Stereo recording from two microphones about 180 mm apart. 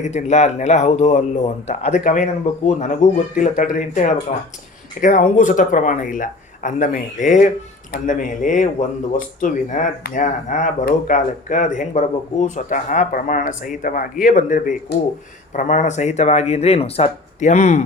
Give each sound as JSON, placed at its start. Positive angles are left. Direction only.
{"t": 0.0, "sound": "speech", "side_deg": 40}